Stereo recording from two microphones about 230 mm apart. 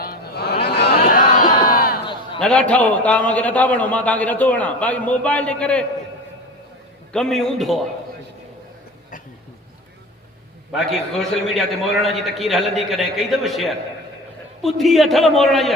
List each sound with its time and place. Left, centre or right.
0.0 s a sound: left
0.8 s crowd: left
2.4 s a man's voice: centre
7.1 s a man's voice: centre
10.7 s a man's voice: centre